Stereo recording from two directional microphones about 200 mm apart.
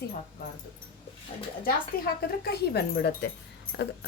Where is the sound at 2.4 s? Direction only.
55° left (ahead or behind).